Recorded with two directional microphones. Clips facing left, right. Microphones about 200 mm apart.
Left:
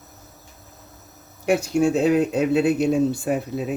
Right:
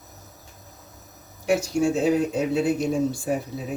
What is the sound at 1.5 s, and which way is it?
Speech, 60° left (ahead or behind).